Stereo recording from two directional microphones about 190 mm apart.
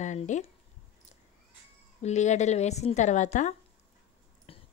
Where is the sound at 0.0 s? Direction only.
40° left (ahead or behind).